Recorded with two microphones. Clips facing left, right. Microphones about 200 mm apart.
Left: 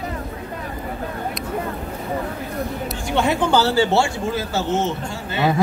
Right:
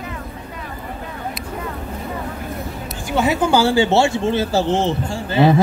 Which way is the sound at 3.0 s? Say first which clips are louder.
Right 2 dB; 5° right (ahead or behind).